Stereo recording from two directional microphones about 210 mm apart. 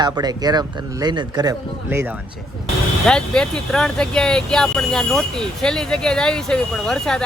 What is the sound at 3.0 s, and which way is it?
Speech, 5° left (ahead or behind).